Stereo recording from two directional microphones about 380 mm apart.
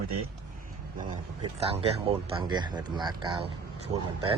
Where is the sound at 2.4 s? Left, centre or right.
Centre.